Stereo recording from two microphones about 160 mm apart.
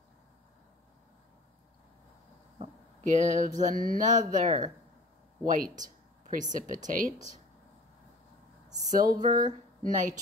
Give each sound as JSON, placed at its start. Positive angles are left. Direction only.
{"t": 3.0, "sound": "speech", "side_deg": -50}
{"t": 8.7, "sound": "speech", "side_deg": -55}